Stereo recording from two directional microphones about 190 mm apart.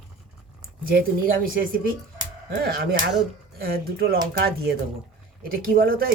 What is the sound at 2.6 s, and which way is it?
Speech, 55° right (ahead or behind).